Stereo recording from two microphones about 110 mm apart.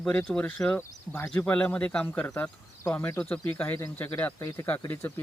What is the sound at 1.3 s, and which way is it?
Speech, 15° left (ahead or behind).